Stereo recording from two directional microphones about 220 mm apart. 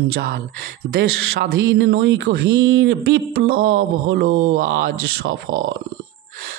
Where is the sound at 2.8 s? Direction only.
50° right (ahead or behind).